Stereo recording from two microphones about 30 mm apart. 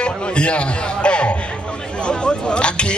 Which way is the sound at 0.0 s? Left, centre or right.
Left.